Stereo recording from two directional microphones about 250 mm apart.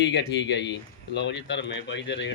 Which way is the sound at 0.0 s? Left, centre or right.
Left.